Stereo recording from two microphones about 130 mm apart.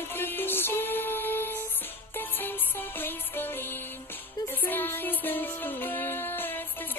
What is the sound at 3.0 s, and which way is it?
Music, 15° left (ahead or behind).